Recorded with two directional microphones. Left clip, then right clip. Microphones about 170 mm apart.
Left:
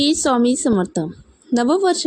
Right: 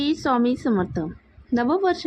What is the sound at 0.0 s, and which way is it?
A woman's voice, 30° left (ahead or behind).